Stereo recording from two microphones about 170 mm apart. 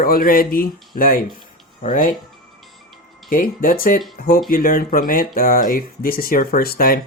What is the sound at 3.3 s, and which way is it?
Speech, 55° left (ahead or behind).